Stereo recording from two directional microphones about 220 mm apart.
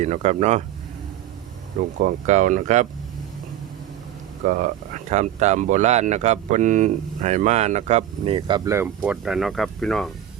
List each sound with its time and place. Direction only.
0.0 s speech: 30° right (ahead or behind)
2.0 s speech: 35° right (ahead or behind)
4.4 s speech: 35° right (ahead or behind); by 10.1 s centre (ahead or behind)